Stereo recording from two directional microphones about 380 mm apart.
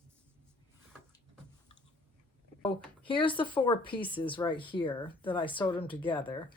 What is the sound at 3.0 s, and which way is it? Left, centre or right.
Speech, centre.